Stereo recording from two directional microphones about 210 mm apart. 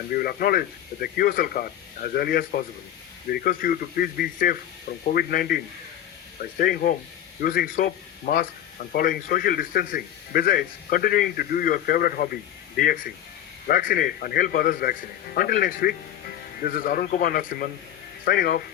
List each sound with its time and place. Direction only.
0.1 s speech: 45° left (ahead or behind)